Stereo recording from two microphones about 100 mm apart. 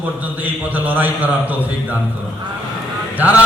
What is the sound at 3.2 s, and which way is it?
Speech, 15° right (ahead or behind).